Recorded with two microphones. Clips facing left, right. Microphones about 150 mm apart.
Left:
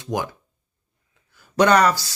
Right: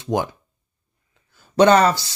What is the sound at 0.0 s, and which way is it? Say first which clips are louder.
Speech: right 4 dB; 25° right (ahead or behind).